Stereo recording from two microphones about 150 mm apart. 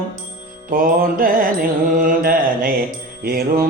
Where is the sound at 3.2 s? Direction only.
80° right.